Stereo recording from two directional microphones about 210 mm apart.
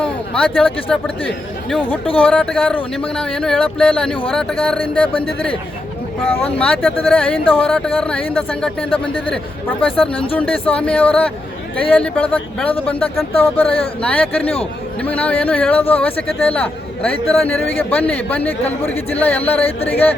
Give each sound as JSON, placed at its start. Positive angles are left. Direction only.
{"t": 0.0, "sound": "speech", "side_deg": 5}
{"t": 14.4, "sound": "speech", "side_deg": 30}
{"t": 15.0, "sound": "a man's voice", "side_deg": 5}